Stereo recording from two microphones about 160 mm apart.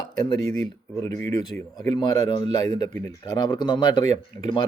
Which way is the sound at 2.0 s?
30° left (ahead or behind).